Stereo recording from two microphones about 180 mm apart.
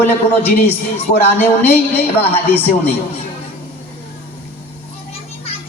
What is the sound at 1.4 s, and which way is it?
A woman's voice, 10° left (ahead or behind).